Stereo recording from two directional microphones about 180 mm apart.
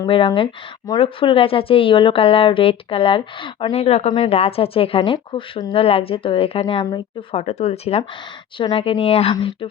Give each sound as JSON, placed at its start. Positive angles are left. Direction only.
{"t": 0.0, "sound": "speech", "side_deg": 25}